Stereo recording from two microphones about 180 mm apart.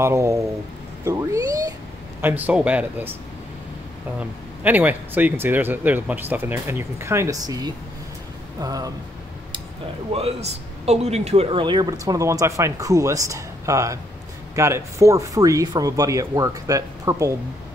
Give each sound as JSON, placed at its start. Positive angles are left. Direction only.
{"t": 0.0, "sound": "speech", "side_deg": -15}
{"t": 1.0, "sound": "cat", "side_deg": -15}
{"t": 2.2, "sound": "speech", "side_deg": -10}
{"t": 4.2, "sound": "speech", "side_deg": -10}
{"t": 10.1, "sound": "speech", "side_deg": -35}